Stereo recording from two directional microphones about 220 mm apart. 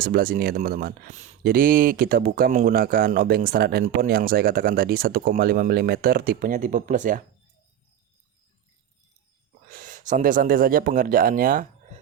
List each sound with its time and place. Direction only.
0.0 s speech: 40° right (ahead or behind)
9.6 s speech: 40° right (ahead or behind)